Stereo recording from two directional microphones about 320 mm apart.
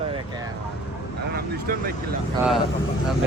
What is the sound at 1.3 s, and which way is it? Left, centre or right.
Speech, right.